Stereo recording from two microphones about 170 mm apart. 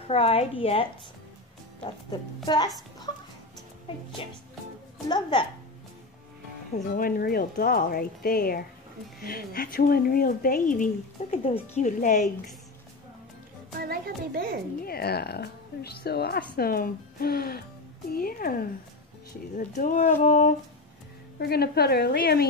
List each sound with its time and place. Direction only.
0.1 s a woman's voice: 35° left (ahead or behind)
1.8 s speech: 25° left (ahead or behind)
5.0 s speech: 25° left (ahead or behind)
7.0 s a woman's voice: 60° left (ahead or behind)
11.4 s speech: 40° left (ahead or behind)
13.7 s a woman's voice: 60° right (ahead or behind)
14.9 s a woman's voice: 65° left (ahead or behind); by 20.5 s 45° left (ahead or behind)
21.4 s a woman's voice: 65° left (ahead or behind)